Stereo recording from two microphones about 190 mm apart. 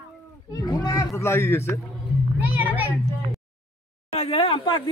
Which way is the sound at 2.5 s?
10° right (ahead or behind).